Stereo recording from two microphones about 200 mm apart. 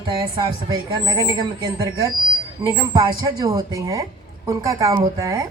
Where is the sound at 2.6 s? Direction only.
20° right (ahead or behind).